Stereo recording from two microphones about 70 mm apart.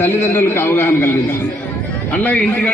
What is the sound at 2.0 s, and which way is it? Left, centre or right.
Speech, left.